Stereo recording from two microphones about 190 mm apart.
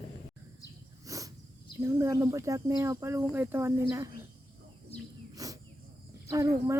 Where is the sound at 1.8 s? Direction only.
15° right (ahead or behind).